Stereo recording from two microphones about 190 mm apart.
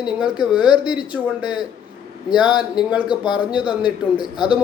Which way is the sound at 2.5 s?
5° right (ahead or behind).